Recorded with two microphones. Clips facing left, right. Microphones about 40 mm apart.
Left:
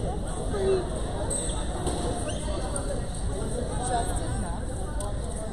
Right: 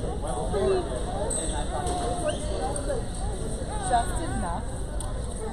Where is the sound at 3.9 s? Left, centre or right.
Right.